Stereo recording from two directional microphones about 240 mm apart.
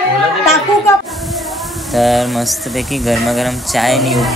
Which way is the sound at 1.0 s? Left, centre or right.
Centre.